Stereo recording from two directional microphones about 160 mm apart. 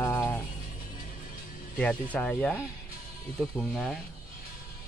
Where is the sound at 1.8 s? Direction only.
10° left (ahead or behind).